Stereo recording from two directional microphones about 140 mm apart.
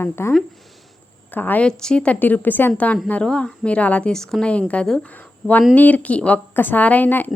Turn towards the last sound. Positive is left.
turn(degrees=15)  # may be behind; listen again after turning